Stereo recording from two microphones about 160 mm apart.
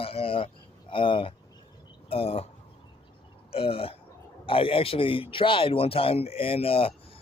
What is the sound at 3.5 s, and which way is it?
A man's voice, 35° left (ahead or behind).